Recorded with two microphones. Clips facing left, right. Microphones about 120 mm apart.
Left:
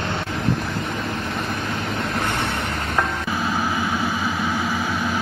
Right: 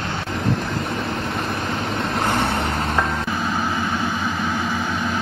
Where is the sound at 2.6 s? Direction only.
35° right (ahead or behind).